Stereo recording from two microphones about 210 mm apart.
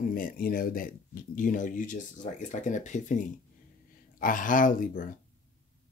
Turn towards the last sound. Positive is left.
turn(degrees=40)  # may be behind; listen again after turning